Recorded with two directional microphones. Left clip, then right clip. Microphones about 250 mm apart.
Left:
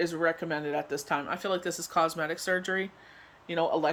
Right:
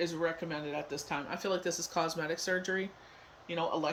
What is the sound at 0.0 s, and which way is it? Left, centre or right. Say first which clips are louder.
Speech: left 5 dB; centre.